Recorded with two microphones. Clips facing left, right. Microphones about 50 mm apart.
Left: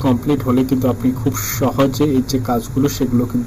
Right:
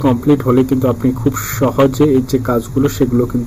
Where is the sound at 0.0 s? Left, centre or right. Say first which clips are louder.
Right 4 dB; centre.